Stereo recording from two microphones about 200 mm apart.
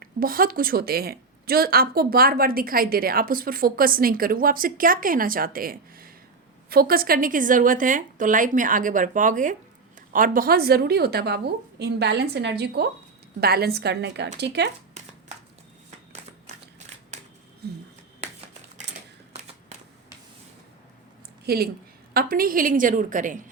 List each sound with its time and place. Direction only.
0.0 s a woman's voice: 45° right (ahead or behind)
21.4 s speech: 50° right (ahead or behind)